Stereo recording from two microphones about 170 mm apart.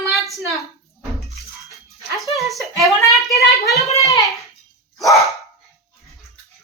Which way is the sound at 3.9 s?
20° left (ahead or behind).